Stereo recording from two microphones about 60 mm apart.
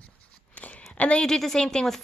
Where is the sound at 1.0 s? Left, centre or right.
Centre.